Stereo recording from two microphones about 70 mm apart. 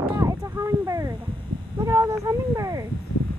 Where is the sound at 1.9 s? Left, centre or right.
Right.